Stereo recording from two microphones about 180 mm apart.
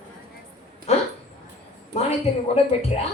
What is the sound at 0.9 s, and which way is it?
Speech, 35° left (ahead or behind).